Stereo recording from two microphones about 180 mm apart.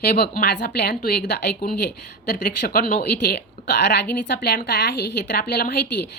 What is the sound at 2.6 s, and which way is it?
A woman's voice, 55° left (ahead or behind).